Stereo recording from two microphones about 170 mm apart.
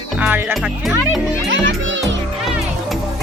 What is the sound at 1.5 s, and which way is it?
Children playing, 90° right.